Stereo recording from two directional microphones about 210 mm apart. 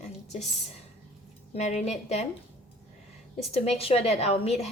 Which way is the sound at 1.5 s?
35° left (ahead or behind).